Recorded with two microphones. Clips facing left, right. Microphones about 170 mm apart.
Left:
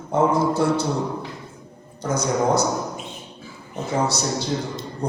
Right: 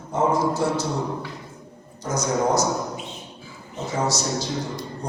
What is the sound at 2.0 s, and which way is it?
A man's voice, 60° left (ahead or behind).